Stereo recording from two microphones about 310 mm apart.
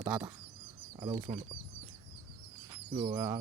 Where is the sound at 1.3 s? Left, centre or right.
Centre.